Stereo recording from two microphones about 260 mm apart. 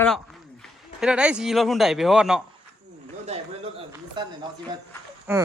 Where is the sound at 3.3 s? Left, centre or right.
Right.